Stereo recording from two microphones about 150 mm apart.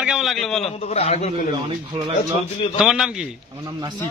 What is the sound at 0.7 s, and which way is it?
Speech, 40° left (ahead or behind).